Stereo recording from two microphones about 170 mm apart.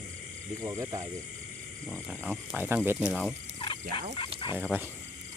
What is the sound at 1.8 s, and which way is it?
Speech, centre (ahead or behind).